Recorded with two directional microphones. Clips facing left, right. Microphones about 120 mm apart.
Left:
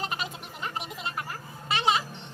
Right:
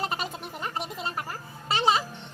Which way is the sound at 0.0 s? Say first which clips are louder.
Right 3 dB; 40° right (ahead or behind).